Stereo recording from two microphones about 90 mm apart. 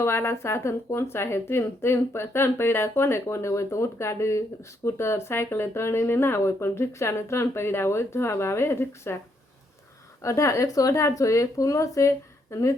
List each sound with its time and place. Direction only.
0.0 s speech: 30° left (ahead or behind)
10.2 s speech: 35° left (ahead or behind)